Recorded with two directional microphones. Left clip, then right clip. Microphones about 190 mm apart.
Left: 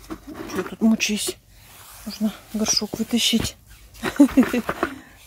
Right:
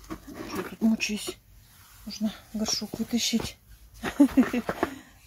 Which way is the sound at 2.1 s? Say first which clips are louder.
Left 5 dB; 35° left (ahead or behind).